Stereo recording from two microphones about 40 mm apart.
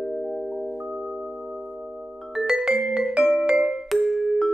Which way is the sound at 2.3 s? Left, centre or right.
Centre.